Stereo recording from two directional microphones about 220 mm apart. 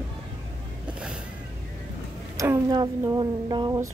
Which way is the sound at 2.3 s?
15° right (ahead or behind).